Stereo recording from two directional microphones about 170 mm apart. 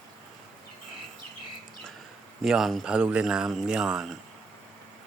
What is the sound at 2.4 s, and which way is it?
Speech, centre (ahead or behind).